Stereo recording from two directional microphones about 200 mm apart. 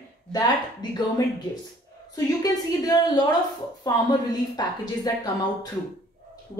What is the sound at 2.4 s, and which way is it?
A woman's voice, 20° left (ahead or behind).